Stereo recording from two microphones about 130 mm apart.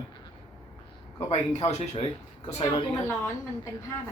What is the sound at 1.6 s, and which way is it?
Speech, 55° left (ahead or behind).